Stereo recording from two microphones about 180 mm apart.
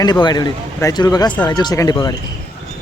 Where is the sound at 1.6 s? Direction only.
20° left (ahead or behind).